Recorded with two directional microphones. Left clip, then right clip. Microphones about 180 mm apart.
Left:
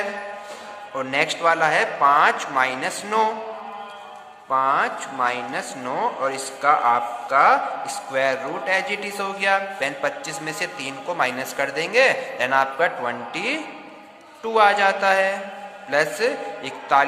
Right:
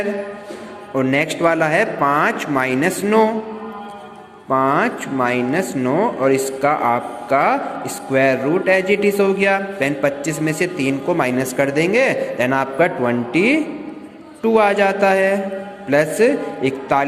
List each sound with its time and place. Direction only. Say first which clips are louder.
0.9 s speech: right 4 dB; 20° right (ahead or behind)
4.4 s speech: right 3 dB; 20° right (ahead or behind)